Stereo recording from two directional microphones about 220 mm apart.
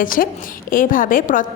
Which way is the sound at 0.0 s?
40° left (ahead or behind).